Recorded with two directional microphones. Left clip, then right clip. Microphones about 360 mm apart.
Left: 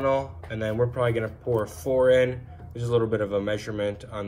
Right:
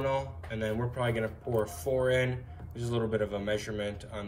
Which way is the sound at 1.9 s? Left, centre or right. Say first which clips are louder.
Left 8 dB; left.